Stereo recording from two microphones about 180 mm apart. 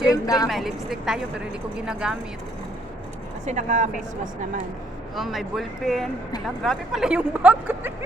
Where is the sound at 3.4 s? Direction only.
45° right (ahead or behind).